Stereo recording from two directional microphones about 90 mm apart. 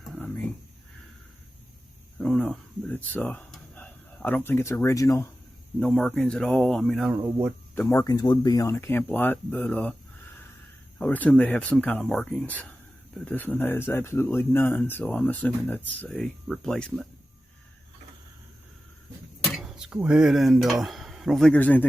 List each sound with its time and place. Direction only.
0.2 s speech: 15° left (ahead or behind)
2.1 s a sound: 10° left (ahead or behind)
2.9 s speech: 20° left (ahead or behind); by 5.3 s 35° left (ahead or behind)
5.8 s speech: 10° left (ahead or behind)
7.8 s speech: 35° left (ahead or behind)
8.1 s speech: 50° left (ahead or behind)
8.6 s speech: 35° left (ahead or behind)
8.9 s speech: 20° left (ahead or behind)
10.9 s speech: 20° left (ahead or behind)
16.0 s speech: 5° left (ahead or behind)
19.5 s speech: 5° right (ahead or behind)
21.5 s speech: 15° left (ahead or behind)